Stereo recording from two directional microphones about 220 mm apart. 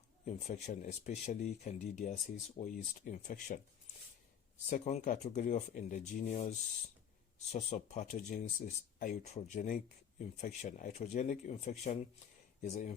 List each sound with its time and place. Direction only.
0.3 s speech: 30° left (ahead or behind)
4.7 s speech: 35° left (ahead or behind)
7.5 s speech: 30° left (ahead or behind)